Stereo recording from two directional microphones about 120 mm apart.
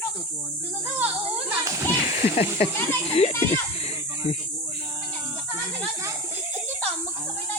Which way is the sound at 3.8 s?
60° left (ahead or behind).